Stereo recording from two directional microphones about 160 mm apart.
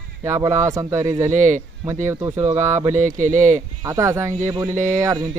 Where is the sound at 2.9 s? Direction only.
50° right (ahead or behind).